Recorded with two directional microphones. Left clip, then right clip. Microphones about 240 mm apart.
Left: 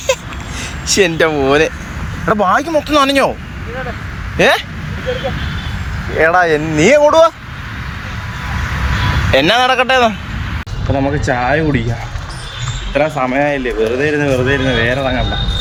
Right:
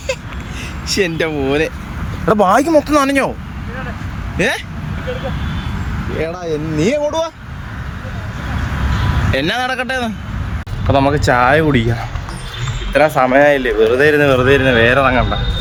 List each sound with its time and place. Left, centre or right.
0.9 s speech: centre
2.2 s speech: right
4.4 s speech: centre
6.4 s speech: centre
9.3 s speech: centre
12.9 s speech: centre